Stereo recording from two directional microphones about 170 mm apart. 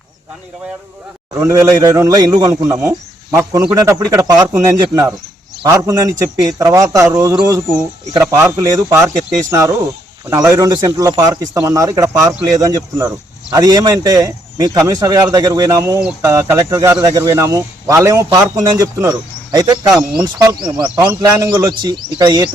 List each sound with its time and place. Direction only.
1.4 s speech: 20° right (ahead or behind)
19.9 s speech: 5° right (ahead or behind)
20.2 s speech: 25° right (ahead or behind)